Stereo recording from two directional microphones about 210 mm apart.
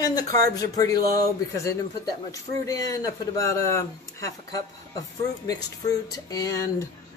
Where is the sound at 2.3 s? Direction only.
15° left (ahead or behind).